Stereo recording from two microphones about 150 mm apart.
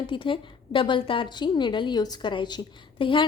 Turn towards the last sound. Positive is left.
turn(degrees=35)  # may be behind; listen again after turning